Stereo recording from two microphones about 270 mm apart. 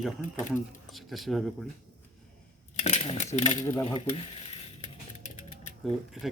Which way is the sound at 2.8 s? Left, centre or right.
Left.